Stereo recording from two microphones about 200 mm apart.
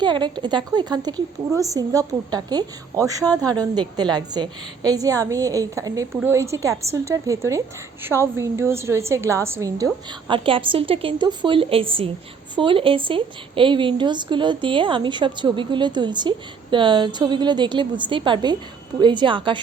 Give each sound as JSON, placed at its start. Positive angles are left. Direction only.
{"t": 0.0, "sound": "a woman's voice", "side_deg": -20}